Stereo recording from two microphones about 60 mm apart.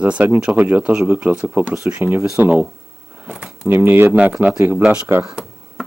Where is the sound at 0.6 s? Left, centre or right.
Right.